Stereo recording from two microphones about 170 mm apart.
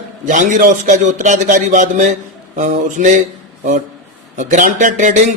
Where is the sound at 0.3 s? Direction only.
50° right (ahead or behind).